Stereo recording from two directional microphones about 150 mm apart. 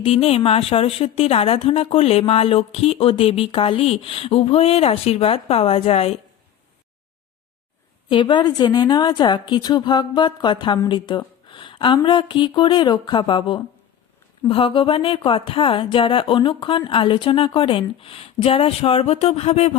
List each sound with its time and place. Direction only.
0.0 s a woman's voice: 40° left (ahead or behind)
8.1 s a woman's voice: 30° left (ahead or behind)